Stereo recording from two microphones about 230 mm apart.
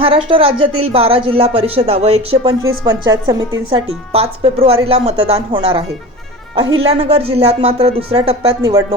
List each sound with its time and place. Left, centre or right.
0.0 s speech: right